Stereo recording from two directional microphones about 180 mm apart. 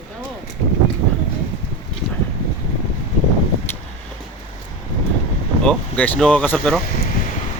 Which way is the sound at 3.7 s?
15° left (ahead or behind).